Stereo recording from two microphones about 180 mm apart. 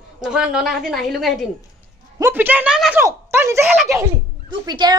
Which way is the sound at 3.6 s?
5° right (ahead or behind).